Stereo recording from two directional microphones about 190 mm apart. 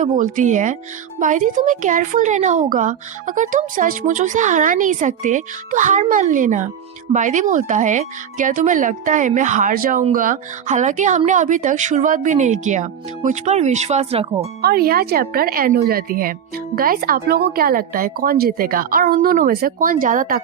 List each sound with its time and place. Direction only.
0.0 s speech: 40° right (ahead or behind)
14.6 s speech: 50° right (ahead or behind)